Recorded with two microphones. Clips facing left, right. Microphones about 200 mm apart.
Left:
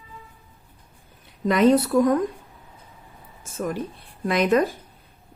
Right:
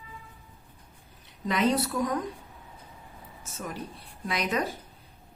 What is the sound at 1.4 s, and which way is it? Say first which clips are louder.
Speech: left 8 dB; 50° left (ahead or behind).